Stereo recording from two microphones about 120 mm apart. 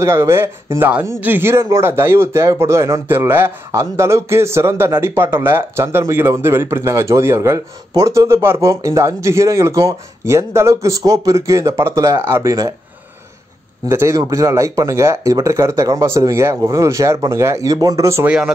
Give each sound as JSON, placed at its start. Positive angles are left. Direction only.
{"t": 0.0, "sound": "speech", "side_deg": -20}
{"t": 13.8, "sound": "speech", "side_deg": -25}
{"t": 18.2, "sound": "speech", "side_deg": -10}